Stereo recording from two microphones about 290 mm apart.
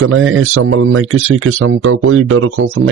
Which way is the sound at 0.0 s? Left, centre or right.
Right.